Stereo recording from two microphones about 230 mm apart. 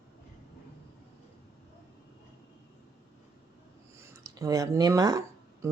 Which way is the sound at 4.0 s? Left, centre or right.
Centre.